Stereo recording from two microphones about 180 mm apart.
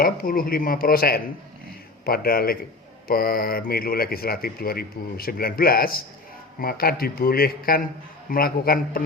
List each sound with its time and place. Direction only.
0.0 s speech: 55° left (ahead or behind)